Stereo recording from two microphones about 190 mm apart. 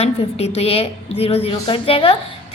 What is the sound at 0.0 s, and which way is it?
A woman's voice, 35° left (ahead or behind).